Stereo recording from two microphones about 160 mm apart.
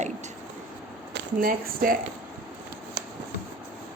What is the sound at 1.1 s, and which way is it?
Speech, 65° right (ahead or behind).